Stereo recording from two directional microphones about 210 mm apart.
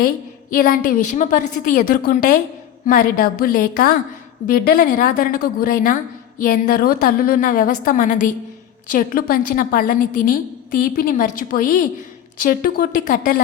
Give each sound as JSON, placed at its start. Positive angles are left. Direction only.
{"t": 0.5, "sound": "a woman's voice", "side_deg": 40}